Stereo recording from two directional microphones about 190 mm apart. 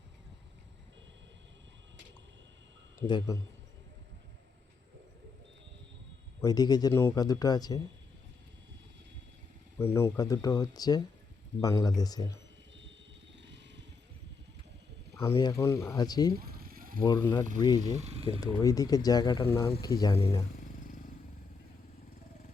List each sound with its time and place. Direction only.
3.1 s speech: 20° left (ahead or behind)
6.4 s speech: 20° left (ahead or behind)
9.7 s speech: 15° left (ahead or behind)
15.4 s speech: 20° left (ahead or behind)
16.3 s a sound: 55° right (ahead or behind)
17.0 s speech: 15° left (ahead or behind)
17.9 s speech: 35° right (ahead or behind)
18.3 s speech: 20° left (ahead or behind)
20.6 s a sound: 45° left (ahead or behind)